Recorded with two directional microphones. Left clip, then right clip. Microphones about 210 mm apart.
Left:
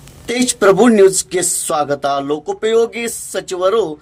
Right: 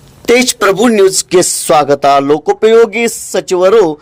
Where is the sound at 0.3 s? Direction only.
35° right (ahead or behind).